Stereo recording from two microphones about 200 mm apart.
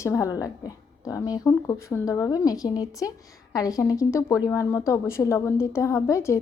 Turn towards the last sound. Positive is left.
turn(degrees=15)  # may be behind; listen again after turning